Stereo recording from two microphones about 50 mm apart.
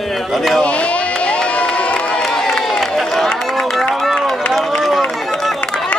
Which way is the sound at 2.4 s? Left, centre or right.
Centre.